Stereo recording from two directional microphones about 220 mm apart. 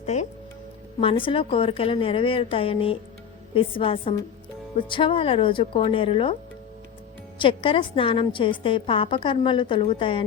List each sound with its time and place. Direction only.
0.0 s a woman's voice: 30° left (ahead or behind)
7.3 s a woman's voice: 25° left (ahead or behind)